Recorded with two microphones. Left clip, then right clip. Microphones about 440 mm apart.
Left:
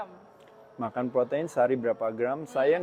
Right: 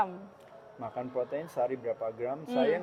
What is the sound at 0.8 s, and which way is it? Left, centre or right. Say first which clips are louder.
Speech: left 7 dB; left.